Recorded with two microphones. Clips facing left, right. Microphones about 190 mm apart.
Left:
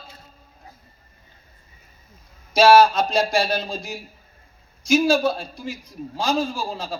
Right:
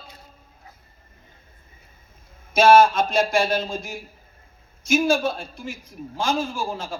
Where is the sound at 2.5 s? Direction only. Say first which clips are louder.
Left 1 dB; 50° right (ahead or behind).